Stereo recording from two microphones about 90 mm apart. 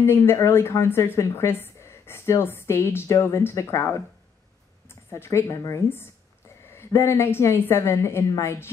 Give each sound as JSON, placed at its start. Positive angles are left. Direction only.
{"t": 0.0, "sound": "a woman's voice", "side_deg": 30}